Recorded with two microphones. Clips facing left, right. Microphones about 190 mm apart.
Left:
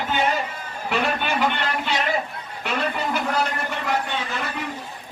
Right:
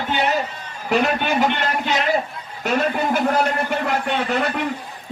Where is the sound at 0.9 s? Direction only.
40° right (ahead or behind).